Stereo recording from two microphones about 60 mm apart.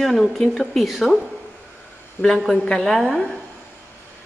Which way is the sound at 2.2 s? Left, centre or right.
Centre.